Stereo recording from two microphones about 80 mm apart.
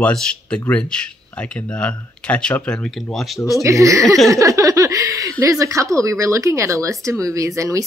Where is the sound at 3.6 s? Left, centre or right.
Right.